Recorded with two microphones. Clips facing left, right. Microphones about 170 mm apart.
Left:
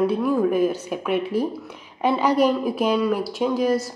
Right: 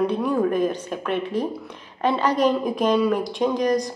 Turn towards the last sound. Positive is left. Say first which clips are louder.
# even
turn(degrees=5)  # may be behind; listen again after turning